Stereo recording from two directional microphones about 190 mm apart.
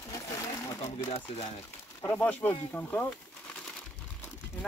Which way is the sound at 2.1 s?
5° left (ahead or behind).